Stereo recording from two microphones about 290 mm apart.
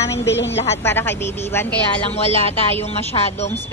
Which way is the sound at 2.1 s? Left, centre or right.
Left.